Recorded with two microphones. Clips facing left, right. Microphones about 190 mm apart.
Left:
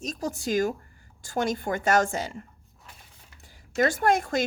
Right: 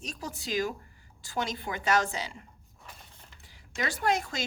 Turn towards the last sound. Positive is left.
turn(degrees=50)  # may be behind; listen again after turning